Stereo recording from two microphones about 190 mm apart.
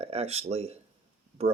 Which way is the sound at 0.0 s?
30° right (ahead or behind).